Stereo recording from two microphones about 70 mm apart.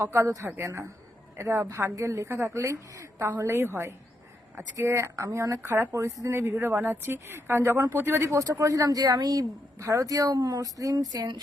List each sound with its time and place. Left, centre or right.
0.0 s a woman's voice: right
8.6 s a woman's voice: right
9.7 s speech: right